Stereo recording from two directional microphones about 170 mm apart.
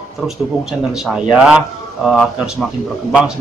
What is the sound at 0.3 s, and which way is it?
Speech, centre (ahead or behind).